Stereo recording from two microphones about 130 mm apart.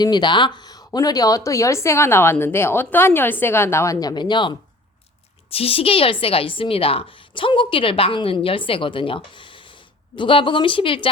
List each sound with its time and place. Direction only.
0.0 s speech: 35° left (ahead or behind)
4.1 s speech: 35° left (ahead or behind)
5.5 s a woman's voice: 50° left (ahead or behind)